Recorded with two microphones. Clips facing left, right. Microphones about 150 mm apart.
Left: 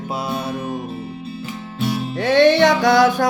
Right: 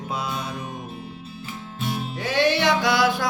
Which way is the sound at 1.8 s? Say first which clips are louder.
Left 7 dB; 75° left (ahead or behind).